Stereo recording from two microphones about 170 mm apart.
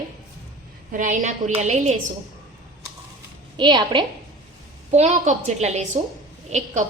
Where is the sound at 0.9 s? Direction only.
50° right (ahead or behind).